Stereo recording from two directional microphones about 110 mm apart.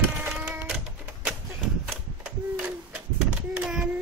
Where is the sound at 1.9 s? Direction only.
10° right (ahead or behind).